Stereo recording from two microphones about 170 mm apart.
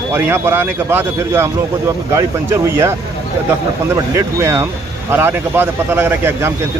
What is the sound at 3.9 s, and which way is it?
A man's voice, 15° right (ahead or behind).